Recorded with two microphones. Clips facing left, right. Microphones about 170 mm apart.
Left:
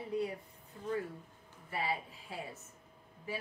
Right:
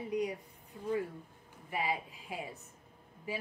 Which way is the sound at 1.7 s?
15° right (ahead or behind).